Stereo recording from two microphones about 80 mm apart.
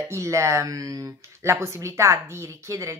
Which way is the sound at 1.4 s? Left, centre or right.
Right.